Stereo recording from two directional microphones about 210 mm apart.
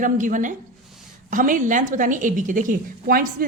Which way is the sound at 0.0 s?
40° right (ahead or behind).